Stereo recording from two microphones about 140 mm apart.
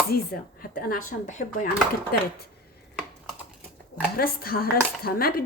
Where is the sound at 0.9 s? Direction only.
70° left (ahead or behind).